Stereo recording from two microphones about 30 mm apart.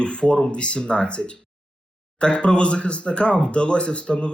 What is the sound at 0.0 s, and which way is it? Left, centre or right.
Speech, left.